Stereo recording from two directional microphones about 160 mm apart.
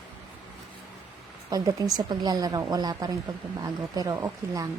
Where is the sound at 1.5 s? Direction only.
25° right (ahead or behind).